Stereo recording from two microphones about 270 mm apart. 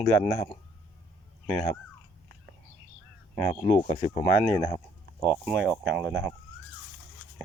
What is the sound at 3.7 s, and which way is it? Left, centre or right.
Speech, centre.